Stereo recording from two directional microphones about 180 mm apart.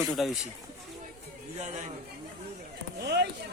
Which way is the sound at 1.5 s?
40° right (ahead or behind).